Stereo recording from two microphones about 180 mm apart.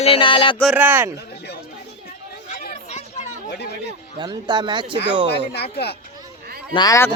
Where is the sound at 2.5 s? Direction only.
45° left (ahead or behind).